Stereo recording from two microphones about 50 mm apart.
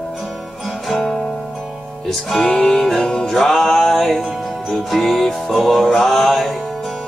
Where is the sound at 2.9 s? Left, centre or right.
Centre.